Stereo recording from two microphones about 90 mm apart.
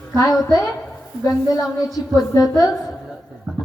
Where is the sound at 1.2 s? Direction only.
40° left (ahead or behind).